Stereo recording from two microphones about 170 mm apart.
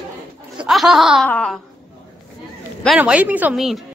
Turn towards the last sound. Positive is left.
turn(degrees=0)  # may be behind; listen again after turning